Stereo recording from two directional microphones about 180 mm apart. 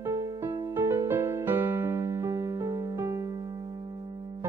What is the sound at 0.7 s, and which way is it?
Music, 15° right (ahead or behind).